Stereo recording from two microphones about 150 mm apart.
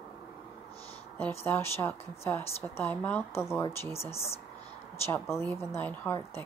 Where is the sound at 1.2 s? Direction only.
15° left (ahead or behind).